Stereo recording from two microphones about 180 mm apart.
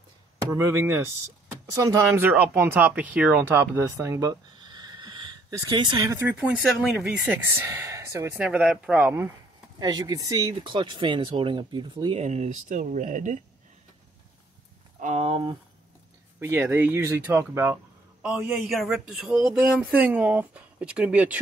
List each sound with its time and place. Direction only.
0.5 s speech: 15° right (ahead or behind)
6.3 s speech: 5° right (ahead or behind); by 13.4 s 45° right (ahead or behind)
15.0 s a sound: 40° right (ahead or behind)
16.3 s speech: 15° right (ahead or behind)